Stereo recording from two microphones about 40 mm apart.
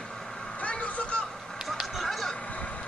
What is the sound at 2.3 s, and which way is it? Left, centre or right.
Vehicle, left.